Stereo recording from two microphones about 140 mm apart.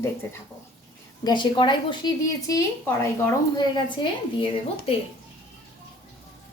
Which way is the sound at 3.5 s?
35° left (ahead or behind).